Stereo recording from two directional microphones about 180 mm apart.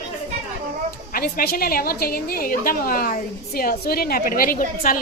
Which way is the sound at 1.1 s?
55° left (ahead or behind).